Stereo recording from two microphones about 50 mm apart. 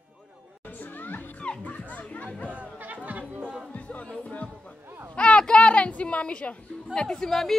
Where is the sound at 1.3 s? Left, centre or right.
Left.